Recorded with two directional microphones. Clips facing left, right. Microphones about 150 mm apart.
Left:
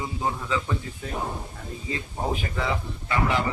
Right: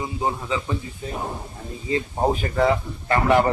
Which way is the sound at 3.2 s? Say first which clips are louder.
Right 10 dB; 60° right (ahead or behind).